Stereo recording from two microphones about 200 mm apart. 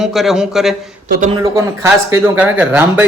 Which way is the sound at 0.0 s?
Centre (ahead or behind).